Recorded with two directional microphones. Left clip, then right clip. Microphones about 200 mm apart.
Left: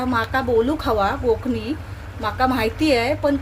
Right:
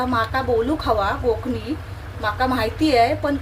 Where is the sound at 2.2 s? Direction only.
35° left (ahead or behind).